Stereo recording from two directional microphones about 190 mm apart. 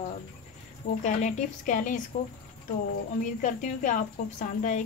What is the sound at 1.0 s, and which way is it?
A woman's voice, 40° left (ahead or behind).